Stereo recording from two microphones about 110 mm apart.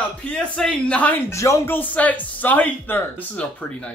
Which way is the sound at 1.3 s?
25° left (ahead or behind).